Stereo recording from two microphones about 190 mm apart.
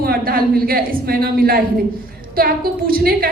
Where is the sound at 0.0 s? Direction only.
50° right (ahead or behind).